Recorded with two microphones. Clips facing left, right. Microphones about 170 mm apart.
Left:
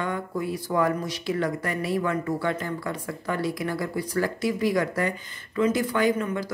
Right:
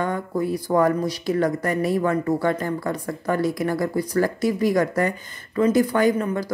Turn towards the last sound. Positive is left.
turn(degrees=-40)  # may be behind; listen again after turning